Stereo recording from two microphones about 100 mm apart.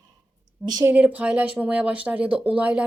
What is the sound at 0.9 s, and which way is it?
A woman's voice, 15° right (ahead or behind).